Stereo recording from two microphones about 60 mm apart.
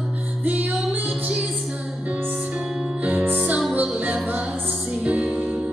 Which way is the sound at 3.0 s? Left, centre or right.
Right.